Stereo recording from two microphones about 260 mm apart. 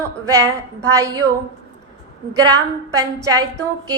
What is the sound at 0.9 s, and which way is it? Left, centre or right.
Speech, centre.